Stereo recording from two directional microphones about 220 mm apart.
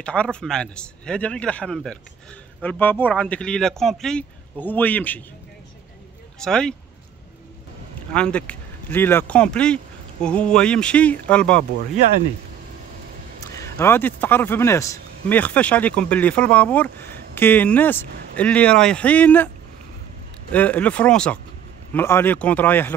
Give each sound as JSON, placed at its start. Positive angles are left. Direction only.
{"t": 0.0, "sound": "a man's voice", "side_deg": 5}
{"t": 6.4, "sound": "a man's voice", "side_deg": 5}
{"t": 8.1, "sound": "a man's voice", "side_deg": 5}
{"t": 13.5, "sound": "speech", "side_deg": 15}
{"t": 20.5, "sound": "speech", "side_deg": 5}